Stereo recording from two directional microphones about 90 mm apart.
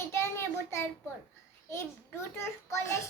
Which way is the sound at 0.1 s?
30° left (ahead or behind).